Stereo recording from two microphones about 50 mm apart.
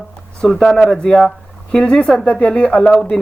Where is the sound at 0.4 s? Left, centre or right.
Centre.